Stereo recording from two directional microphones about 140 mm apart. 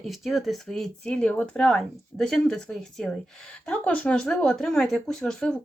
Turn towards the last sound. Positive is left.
turn(degrees=5)  # may be behind; listen again after turning